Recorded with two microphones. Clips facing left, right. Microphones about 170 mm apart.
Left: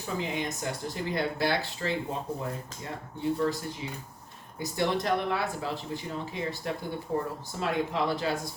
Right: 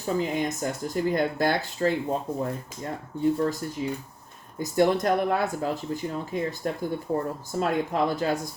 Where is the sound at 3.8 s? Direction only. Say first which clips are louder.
Right 8 dB; 40° right (ahead or behind).